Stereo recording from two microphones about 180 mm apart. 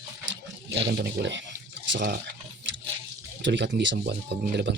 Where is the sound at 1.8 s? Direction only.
90° right.